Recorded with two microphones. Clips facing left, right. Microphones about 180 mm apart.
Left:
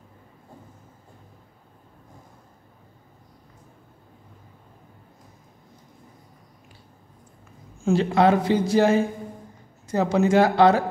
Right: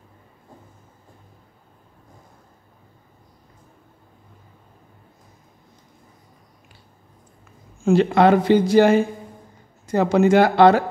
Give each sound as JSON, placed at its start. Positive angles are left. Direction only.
{"t": 7.8, "sound": "speech", "side_deg": -65}